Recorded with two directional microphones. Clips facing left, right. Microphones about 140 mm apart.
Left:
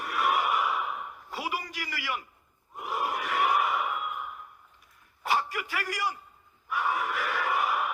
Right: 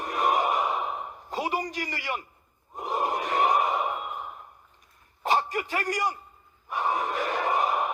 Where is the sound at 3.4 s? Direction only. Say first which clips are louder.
Right 2 dB; 30° right (ahead or behind).